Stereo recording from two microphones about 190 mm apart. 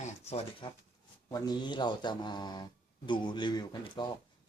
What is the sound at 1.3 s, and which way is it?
Speech, 20° left (ahead or behind).